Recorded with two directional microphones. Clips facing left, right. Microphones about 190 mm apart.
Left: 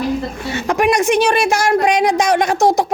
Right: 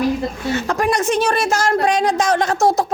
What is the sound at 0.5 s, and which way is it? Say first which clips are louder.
A woman's voice: left 4 dB; 15° left (ahead or behind).